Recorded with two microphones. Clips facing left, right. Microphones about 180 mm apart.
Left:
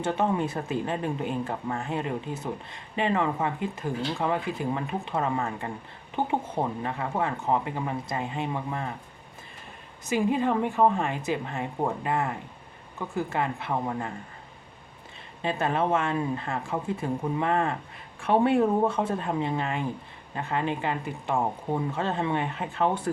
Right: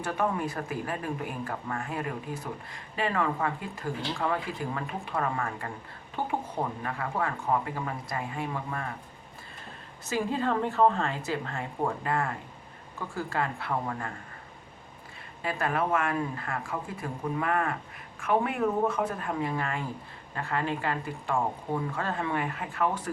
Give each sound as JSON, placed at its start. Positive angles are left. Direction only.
{"t": 0.0, "sound": "speech", "side_deg": 25}
{"t": 10.1, "sound": "speech", "side_deg": 15}
{"t": 15.4, "sound": "speech", "side_deg": 25}